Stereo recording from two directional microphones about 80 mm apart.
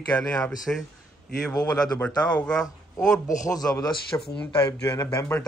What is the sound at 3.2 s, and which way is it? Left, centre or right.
Speech, left.